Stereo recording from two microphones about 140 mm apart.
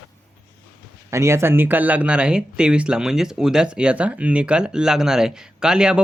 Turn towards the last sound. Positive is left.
turn(degrees=-5)  # may be behind; listen again after turning